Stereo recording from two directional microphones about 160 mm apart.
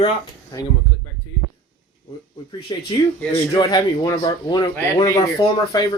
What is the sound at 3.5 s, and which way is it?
Speech, 20° left (ahead or behind).